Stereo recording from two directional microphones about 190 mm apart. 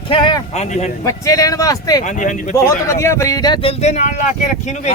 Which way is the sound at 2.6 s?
15° left (ahead or behind).